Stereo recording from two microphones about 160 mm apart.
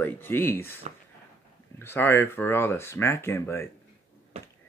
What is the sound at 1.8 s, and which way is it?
Speech, 15° left (ahead or behind).